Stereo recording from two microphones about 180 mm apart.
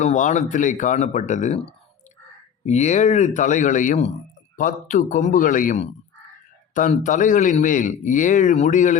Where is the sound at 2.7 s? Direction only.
40° left (ahead or behind).